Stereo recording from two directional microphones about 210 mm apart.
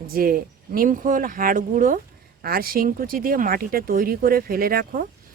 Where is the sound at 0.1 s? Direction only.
45° right (ahead or behind).